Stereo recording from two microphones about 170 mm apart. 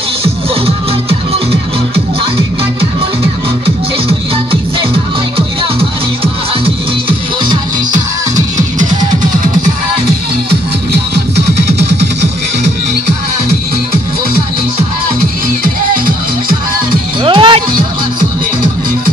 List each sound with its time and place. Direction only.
6.6 s music: 30° right (ahead or behind)
17.2 s music: 30° right (ahead or behind)